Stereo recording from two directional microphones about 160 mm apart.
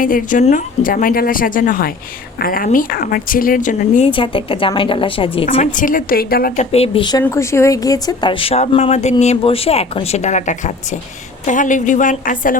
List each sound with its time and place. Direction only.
0.0 s speech: 55° left (ahead or behind)
4.1 s speech: 35° left (ahead or behind)
5.7 s speech: 60° left (ahead or behind)
6.6 s a woman's voice: 40° left (ahead or behind); by 12.5 s 55° left (ahead or behind)